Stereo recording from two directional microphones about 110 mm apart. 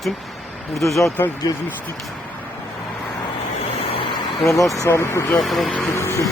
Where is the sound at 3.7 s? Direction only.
55° left (ahead or behind).